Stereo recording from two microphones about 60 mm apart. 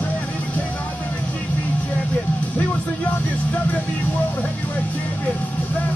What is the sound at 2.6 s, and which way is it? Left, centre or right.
Music, left.